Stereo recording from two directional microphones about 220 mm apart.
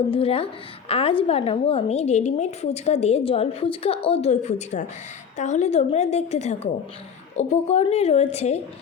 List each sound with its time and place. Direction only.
0.1 s a woman's voice: 25° left (ahead or behind)